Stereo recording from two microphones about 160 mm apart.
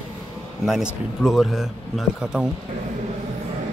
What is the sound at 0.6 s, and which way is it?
A man's voice, centre (ahead or behind).